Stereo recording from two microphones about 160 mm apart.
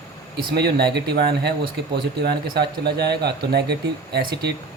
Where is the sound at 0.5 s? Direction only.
90° right.